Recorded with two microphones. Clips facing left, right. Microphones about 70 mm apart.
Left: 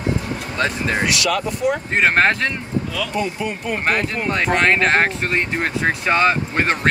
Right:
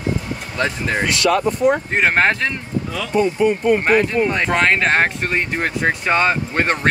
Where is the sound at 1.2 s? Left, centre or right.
Right.